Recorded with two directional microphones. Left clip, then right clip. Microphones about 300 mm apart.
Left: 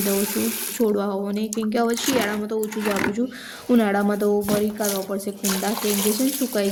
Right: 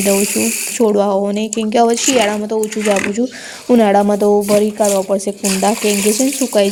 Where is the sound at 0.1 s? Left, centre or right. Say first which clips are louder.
Right 10 dB; left.